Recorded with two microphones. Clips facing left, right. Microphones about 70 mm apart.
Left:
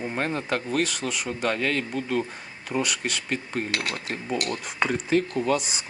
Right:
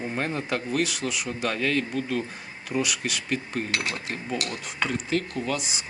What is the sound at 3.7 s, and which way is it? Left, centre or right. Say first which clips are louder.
Speech: even; right.